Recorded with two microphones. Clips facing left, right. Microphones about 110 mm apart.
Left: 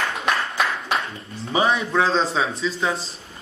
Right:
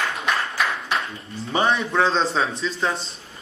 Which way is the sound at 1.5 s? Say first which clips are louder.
Left 1 dB; 5° left (ahead or behind).